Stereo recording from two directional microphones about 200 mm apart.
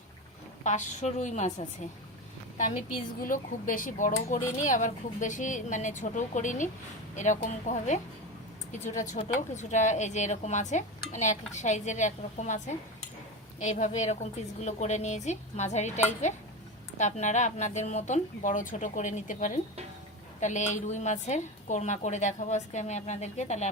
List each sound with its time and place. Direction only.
0.6 s speech: 35° left (ahead or behind)